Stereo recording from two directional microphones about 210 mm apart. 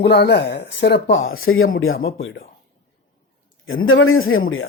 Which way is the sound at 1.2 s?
45° left (ahead or behind).